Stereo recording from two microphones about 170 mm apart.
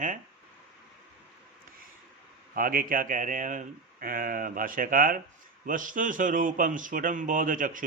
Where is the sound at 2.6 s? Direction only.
55° right (ahead or behind).